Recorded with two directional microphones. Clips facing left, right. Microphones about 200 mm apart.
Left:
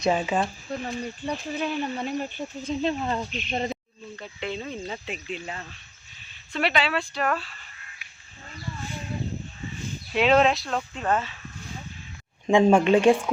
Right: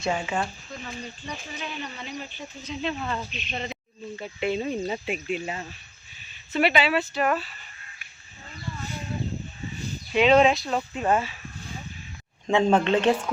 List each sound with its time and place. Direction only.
0.0 s speech: 20° left (ahead or behind)
0.7 s speech: 60° left (ahead or behind)
2.8 s speech: 35° left (ahead or behind)
4.2 s speech: 10° right (ahead or behind)
10.1 s speech: centre (ahead or behind)
12.5 s speech: 10° left (ahead or behind)